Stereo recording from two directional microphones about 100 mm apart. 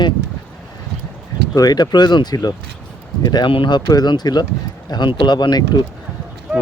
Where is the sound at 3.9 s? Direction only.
45° left (ahead or behind).